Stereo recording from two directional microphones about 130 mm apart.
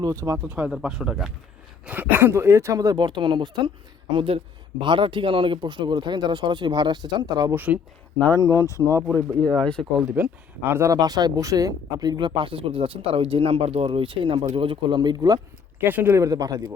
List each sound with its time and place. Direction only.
0.0 s speech: 25° right (ahead or behind)
0.4 s speech: 10° right (ahead or behind); by 7.5 s 30° right (ahead or behind)
7.5 s speech: 15° right (ahead or behind)
8.4 s speech: 25° left (ahead or behind)
9.1 s speech: 30° right (ahead or behind)
9.6 s speech: 5° left (ahead or behind)
10.7 s speech: 20° right (ahead or behind)
10.9 s speech: 30° right (ahead or behind)
15.8 s speech: 15° right (ahead or behind)